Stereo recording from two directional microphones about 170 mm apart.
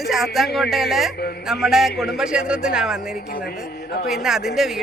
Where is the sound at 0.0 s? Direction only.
Centre (ahead or behind).